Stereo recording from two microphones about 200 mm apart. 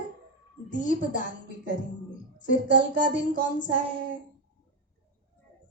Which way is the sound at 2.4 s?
40° left (ahead or behind).